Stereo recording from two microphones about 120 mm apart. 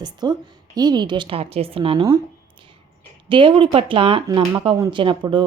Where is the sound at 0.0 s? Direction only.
35° right (ahead or behind).